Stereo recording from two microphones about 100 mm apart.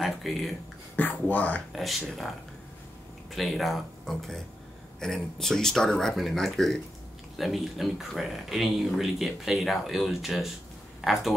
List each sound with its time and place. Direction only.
0.0 s speech: centre (ahead or behind)
0.9 s speech: 15° left (ahead or behind)
1.8 s speech: centre (ahead or behind)